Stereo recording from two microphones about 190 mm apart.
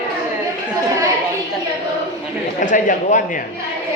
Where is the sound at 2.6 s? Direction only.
40° left (ahead or behind).